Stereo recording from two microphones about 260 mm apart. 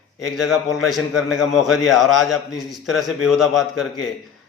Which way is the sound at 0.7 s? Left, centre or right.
Centre.